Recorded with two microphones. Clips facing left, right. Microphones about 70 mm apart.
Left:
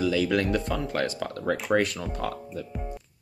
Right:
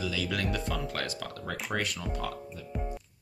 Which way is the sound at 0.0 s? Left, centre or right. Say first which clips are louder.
Left 8 dB; left.